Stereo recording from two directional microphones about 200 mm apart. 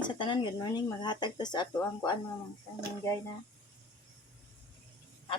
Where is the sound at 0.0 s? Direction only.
20° left (ahead or behind).